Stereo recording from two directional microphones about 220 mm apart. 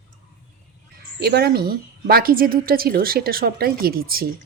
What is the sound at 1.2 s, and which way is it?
A woman's voice, 45° right (ahead or behind).